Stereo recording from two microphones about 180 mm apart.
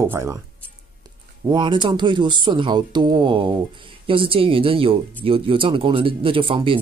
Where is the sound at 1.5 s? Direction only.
25° right (ahead or behind).